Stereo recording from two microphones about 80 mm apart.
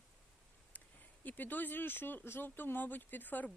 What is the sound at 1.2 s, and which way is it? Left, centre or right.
Speech, left.